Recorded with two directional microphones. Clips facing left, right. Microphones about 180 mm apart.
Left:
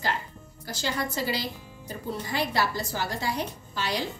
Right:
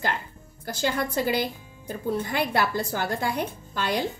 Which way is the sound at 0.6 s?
50° right (ahead or behind).